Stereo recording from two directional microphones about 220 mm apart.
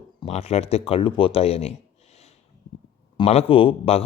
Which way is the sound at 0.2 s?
30° left (ahead or behind).